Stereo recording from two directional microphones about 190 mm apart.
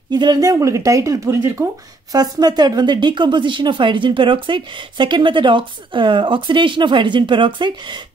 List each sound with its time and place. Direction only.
0.1 s speech: 20° right (ahead or behind)